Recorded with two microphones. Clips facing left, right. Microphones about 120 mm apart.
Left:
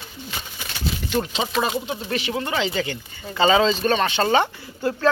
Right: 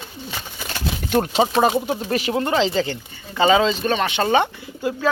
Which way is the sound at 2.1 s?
45° right (ahead or behind).